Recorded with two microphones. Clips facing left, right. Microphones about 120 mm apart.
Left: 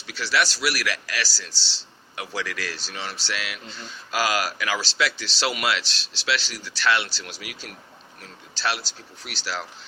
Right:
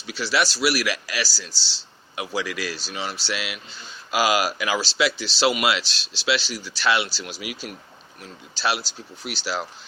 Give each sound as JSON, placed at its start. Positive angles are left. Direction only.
{"t": 0.0, "sound": "speech", "side_deg": -15}
{"t": 5.9, "sound": "speech", "side_deg": 25}
{"t": 6.2, "sound": "speech", "side_deg": -10}